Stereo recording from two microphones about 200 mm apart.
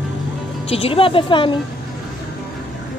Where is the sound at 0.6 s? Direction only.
30° left (ahead or behind).